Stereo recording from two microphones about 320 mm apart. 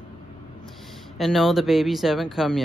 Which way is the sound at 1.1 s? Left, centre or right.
Centre.